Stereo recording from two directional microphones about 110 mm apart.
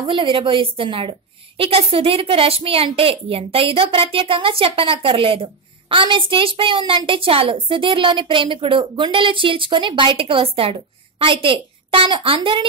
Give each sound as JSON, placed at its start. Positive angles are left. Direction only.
{"t": 0.0, "sound": "a woman's voice", "side_deg": -50}